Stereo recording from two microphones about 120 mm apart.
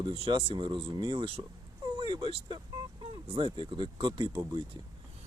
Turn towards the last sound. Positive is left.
turn(degrees=-35)  # may be behind; listen again after turning